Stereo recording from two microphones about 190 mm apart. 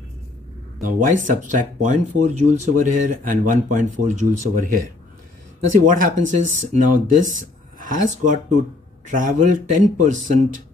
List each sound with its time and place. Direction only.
0.8 s speech: 45° right (ahead or behind)
5.8 s speech: 40° right (ahead or behind)